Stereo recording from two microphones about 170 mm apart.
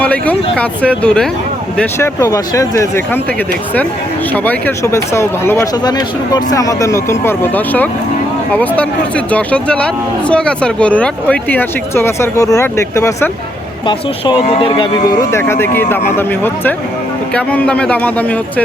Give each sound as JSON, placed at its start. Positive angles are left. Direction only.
{"t": 0.0, "sound": "speech", "side_deg": 10}
{"t": 1.8, "sound": "speech", "side_deg": 15}
{"t": 4.4, "sound": "speech", "side_deg": 15}
{"t": 14.4, "sound": "speech", "side_deg": 30}
{"t": 15.3, "sound": "speech", "side_deg": 15}